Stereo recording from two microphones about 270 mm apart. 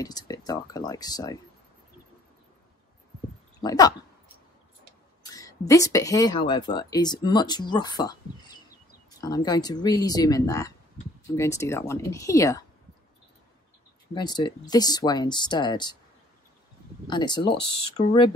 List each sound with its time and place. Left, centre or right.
0.0 s speech: centre
3.6 s speech: centre
5.3 s speech: centre
14.1 s speech: centre
17.1 s speech: centre